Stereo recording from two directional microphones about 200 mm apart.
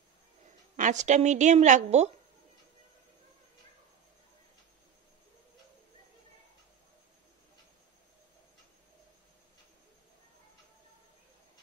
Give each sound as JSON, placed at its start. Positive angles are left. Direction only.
{"t": 0.7, "sound": "a woman's voice", "side_deg": -40}